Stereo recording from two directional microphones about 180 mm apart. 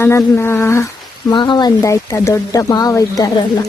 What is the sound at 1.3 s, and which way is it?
Speech, 25° left (ahead or behind).